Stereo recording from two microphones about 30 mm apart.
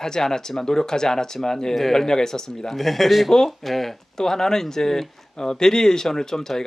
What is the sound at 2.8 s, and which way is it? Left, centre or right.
Speech, centre.